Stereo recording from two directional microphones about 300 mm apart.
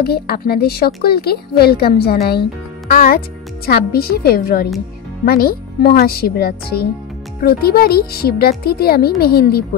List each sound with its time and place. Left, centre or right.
0.0 s a woman's voice: left